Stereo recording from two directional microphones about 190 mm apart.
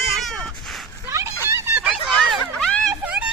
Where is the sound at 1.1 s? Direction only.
15° right (ahead or behind).